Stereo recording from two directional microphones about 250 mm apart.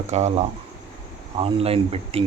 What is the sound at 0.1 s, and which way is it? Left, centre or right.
Speech, right.